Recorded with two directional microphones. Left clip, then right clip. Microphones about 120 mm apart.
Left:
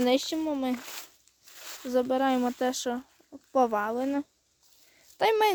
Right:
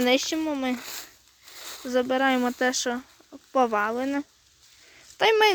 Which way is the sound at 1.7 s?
10° left (ahead or behind).